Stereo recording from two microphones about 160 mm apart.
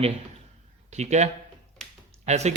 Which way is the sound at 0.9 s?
45° right (ahead or behind).